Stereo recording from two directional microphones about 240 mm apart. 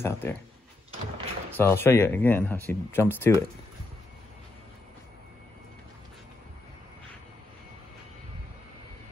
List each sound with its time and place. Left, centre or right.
0.0 s speech: centre
1.6 s speech: centre